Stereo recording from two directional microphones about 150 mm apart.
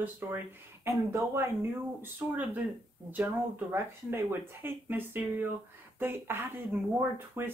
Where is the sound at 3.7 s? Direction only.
15° right (ahead or behind).